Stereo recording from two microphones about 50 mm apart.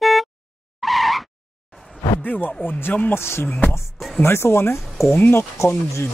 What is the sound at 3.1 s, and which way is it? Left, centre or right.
Speech, left.